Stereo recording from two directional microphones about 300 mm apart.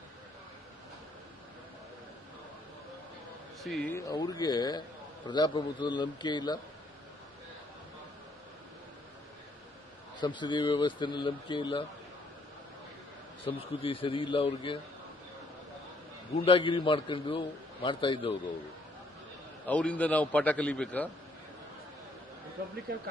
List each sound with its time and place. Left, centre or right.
3.6 s speech: centre
10.2 s speech: centre
13.4 s speech: centre
16.4 s speech: centre
19.6 s a man's voice: centre